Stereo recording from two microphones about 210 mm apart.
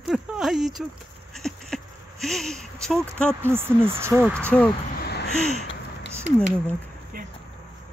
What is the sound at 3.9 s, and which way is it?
Speech, 10° right (ahead or behind).